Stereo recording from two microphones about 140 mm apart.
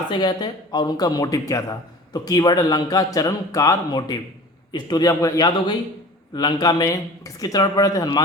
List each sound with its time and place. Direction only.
0.1 s a man's voice: 30° left (ahead or behind)